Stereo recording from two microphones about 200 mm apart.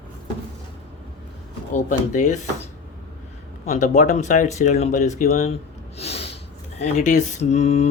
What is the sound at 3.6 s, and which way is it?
Speech, 35° left (ahead or behind).